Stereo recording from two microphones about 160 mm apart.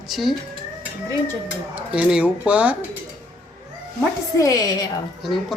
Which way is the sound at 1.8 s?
5° right (ahead or behind).